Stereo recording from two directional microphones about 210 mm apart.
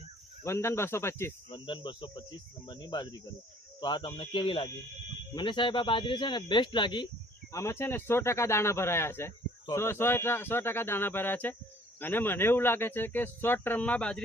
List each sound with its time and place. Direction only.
0.4 s speech: 10° left (ahead or behind)
1.5 s a man's voice: 20° left (ahead or behind); by 14.2 s 5° left (ahead or behind)